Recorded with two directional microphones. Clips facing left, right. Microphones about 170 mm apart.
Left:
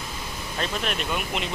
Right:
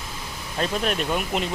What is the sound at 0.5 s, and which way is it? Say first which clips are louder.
Speech: right 4 dB; 40° right (ahead or behind).